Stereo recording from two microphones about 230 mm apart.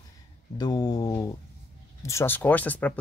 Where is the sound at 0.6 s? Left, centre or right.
Centre.